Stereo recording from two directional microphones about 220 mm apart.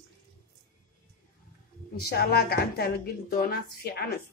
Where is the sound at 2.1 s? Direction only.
45° left (ahead or behind).